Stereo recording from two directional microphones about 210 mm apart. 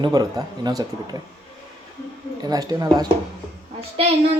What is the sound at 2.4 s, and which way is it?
Speech, 20° right (ahead or behind).